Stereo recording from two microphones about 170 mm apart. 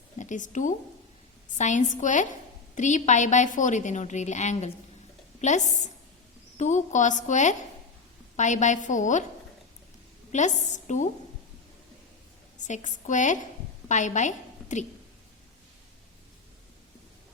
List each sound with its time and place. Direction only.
0.2 s a woman's voice: 45° left (ahead or behind)
10.3 s a woman's voice: 45° left (ahead or behind)
12.6 s a woman's voice: 45° left (ahead or behind)